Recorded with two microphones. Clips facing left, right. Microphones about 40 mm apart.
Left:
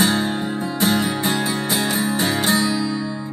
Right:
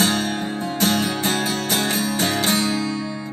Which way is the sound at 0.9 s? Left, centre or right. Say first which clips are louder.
Left 3 dB; right.